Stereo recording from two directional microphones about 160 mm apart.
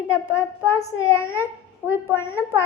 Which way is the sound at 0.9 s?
15° left (ahead or behind).